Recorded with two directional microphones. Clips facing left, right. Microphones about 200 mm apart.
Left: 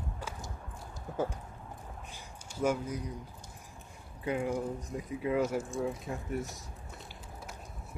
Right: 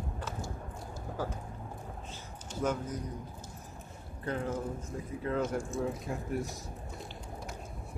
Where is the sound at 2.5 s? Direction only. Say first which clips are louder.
Left 2 dB; 10° left (ahead or behind).